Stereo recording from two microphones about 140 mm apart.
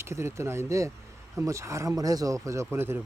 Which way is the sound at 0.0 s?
20° right (ahead or behind).